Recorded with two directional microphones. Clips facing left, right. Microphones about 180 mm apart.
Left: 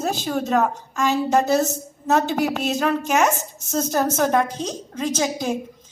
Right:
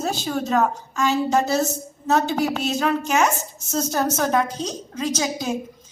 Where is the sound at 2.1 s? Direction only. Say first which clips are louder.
Left 1 dB; 50° left (ahead or behind).